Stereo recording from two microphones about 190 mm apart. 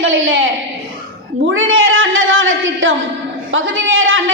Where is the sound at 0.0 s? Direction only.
90° right.